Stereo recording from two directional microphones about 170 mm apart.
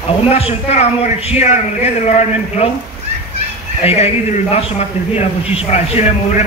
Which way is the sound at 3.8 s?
35° left (ahead or behind).